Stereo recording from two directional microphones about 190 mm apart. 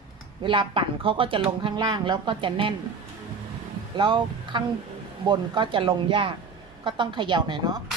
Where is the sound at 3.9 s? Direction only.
25° right (ahead or behind).